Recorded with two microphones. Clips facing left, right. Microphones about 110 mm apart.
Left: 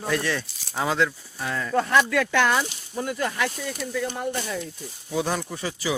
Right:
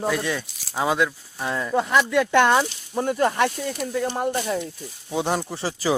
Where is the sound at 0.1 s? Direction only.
10° right (ahead or behind).